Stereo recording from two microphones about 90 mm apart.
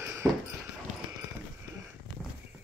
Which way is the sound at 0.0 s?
30° right (ahead or behind).